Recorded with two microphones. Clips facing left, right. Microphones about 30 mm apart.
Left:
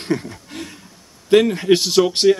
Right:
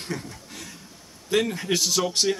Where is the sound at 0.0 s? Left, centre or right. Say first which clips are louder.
Left 10 dB; left.